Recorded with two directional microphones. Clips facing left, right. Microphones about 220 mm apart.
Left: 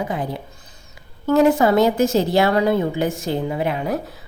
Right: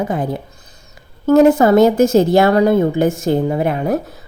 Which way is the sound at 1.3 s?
45° right (ahead or behind).